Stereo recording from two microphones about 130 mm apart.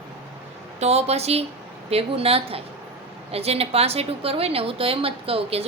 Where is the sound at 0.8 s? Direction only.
55° right (ahead or behind).